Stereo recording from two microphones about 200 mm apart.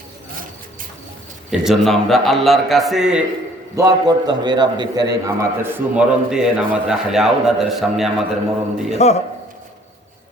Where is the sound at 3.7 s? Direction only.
15° right (ahead or behind); by 8.2 s centre (ahead or behind).